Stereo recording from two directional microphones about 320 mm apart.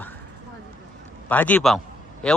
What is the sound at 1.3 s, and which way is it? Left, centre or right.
Speech, centre.